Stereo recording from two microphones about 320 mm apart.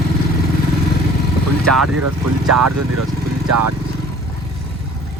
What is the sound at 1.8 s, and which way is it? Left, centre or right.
Speech, right.